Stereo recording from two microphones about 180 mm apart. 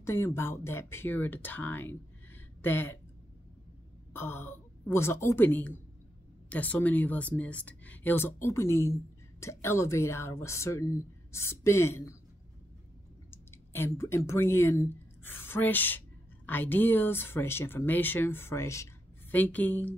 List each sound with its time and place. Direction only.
0.0 s speech: 15° left (ahead or behind)
4.1 s speech: 10° left (ahead or behind)
13.3 s speech: 15° left (ahead or behind)